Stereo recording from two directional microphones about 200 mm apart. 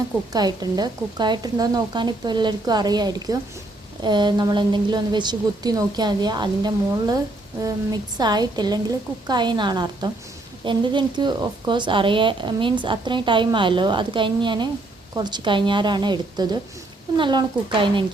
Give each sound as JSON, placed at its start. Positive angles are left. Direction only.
{"t": 0.3, "sound": "a woman's voice", "side_deg": -20}
{"t": 8.2, "sound": "a woman's voice", "side_deg": -20}